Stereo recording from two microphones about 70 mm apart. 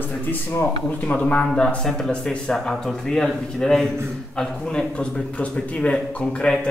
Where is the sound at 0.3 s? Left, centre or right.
Left.